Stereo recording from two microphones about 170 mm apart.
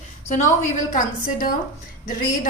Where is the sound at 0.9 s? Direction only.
50° left (ahead or behind).